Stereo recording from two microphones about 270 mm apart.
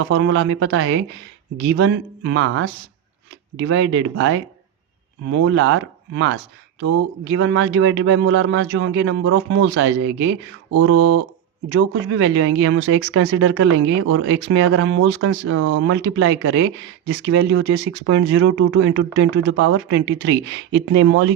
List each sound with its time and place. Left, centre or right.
0.0 s speech: right